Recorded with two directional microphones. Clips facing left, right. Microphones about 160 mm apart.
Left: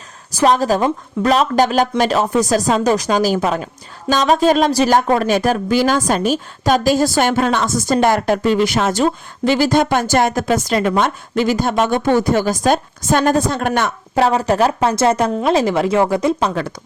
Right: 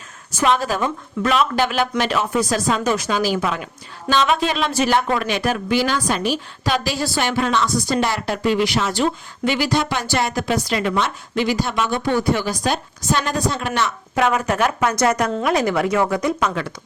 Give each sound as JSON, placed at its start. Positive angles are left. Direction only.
{"t": 0.3, "sound": "speech", "side_deg": 35}
{"t": 14.2, "sound": "speech", "side_deg": 35}